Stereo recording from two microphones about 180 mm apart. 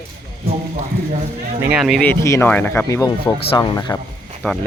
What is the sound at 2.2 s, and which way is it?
Speech, 15° left (ahead or behind).